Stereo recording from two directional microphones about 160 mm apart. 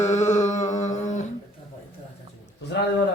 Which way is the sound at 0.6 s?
20° left (ahead or behind).